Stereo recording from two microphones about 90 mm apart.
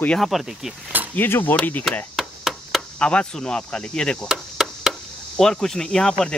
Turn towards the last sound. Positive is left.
turn(degrees=10)  # may be behind; listen again after turning